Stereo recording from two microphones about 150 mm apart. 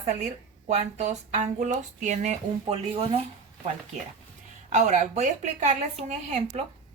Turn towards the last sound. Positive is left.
turn(degrees=-50)  # may be behind; listen again after turning